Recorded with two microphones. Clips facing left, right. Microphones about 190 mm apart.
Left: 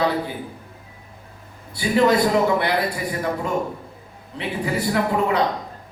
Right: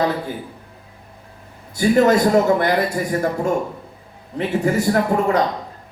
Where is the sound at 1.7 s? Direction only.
45° right (ahead or behind).